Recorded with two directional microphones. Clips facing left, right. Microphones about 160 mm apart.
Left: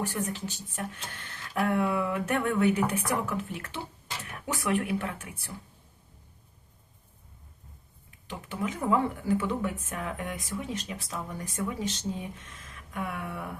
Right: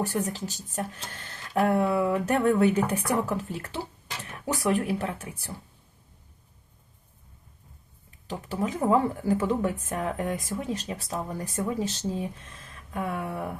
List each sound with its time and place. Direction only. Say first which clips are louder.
0.0 s speech: right 3 dB; 35° right (ahead or behind)
8.3 s speech: right 4 dB; 35° right (ahead or behind)